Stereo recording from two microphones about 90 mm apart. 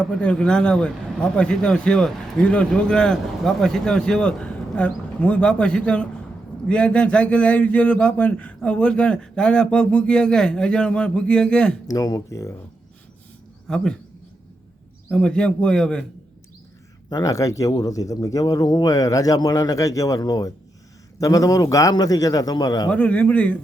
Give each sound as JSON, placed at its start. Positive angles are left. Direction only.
{"t": 0.0, "sound": "a man's voice", "side_deg": 10}
{"t": 11.9, "sound": "speech", "side_deg": 40}
{"t": 13.7, "sound": "a man's voice", "side_deg": 10}
{"t": 15.1, "sound": "a man's voice", "side_deg": 10}
{"t": 17.1, "sound": "speech", "side_deg": 40}
{"t": 22.9, "sound": "a man's voice", "side_deg": 15}